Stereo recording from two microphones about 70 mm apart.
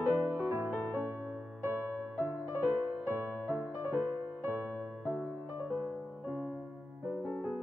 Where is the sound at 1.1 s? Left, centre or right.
Right.